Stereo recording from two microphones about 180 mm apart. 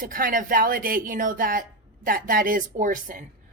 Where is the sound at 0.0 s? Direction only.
50° right (ahead or behind).